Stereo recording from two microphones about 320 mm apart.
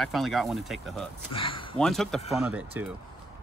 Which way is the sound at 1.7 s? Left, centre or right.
Centre.